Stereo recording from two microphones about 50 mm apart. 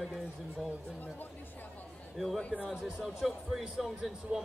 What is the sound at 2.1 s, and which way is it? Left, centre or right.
Speech, centre.